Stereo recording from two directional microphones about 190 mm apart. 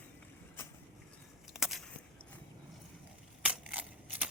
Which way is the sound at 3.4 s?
5° right (ahead or behind).